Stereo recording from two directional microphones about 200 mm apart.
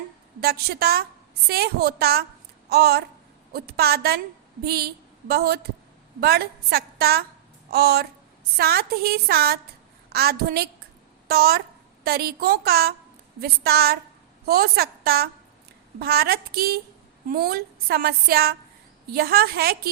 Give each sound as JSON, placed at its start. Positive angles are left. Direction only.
{"t": 0.3, "sound": "a woman's voice", "side_deg": -50}